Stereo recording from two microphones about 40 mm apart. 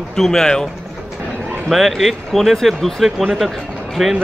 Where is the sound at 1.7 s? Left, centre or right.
Centre.